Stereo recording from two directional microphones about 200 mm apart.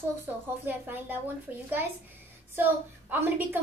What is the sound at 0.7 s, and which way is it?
Speech, 10° right (ahead or behind).